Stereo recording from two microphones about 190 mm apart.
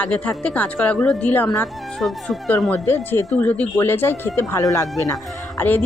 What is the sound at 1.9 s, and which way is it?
Speech, centre (ahead or behind).